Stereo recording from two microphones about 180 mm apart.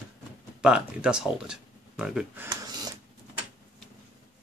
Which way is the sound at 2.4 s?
20° right (ahead or behind).